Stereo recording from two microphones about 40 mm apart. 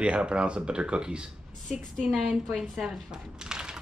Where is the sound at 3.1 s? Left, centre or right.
Centre.